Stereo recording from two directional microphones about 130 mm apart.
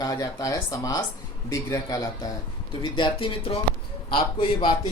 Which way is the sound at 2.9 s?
40° left (ahead or behind).